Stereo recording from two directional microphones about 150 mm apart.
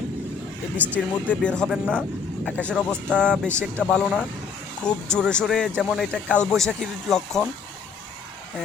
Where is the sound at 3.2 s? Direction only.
5° left (ahead or behind).